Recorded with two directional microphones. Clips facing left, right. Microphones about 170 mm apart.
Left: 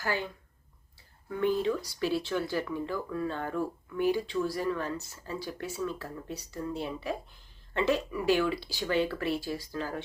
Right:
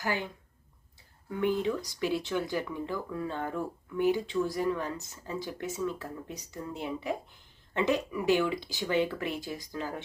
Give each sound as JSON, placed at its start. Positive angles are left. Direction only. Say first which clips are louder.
{"t": 0.0, "sound": "speech", "louder": "even", "side_deg": -15}
{"t": 1.4, "sound": "speech", "louder": "left 1 dB", "side_deg": -15}